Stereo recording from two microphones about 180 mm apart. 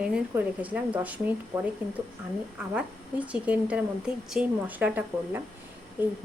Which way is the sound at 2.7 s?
5° right (ahead or behind).